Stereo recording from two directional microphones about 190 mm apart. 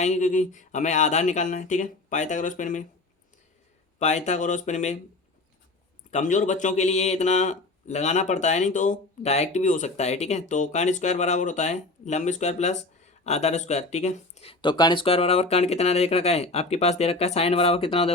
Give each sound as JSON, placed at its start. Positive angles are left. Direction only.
{"t": 0.0, "sound": "speech", "side_deg": 40}
{"t": 3.9, "sound": "speech", "side_deg": 35}
{"t": 6.1, "sound": "speech", "side_deg": 40}